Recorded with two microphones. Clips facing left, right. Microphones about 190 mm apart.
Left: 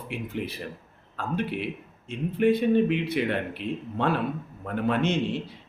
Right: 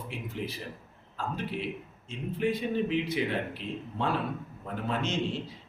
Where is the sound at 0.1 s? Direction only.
60° left (ahead or behind).